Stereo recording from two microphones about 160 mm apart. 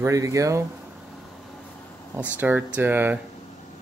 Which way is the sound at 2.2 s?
10° right (ahead or behind).